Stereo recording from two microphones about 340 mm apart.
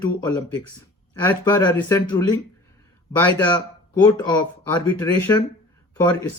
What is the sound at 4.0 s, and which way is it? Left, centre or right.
Speech, centre.